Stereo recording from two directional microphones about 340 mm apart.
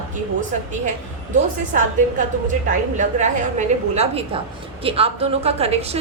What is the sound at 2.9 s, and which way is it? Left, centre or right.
A woman's voice, right.